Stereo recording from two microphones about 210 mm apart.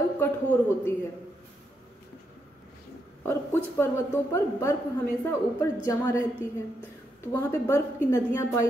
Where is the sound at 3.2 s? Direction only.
10° left (ahead or behind).